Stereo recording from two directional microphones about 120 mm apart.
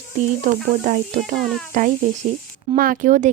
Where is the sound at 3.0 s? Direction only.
90° right.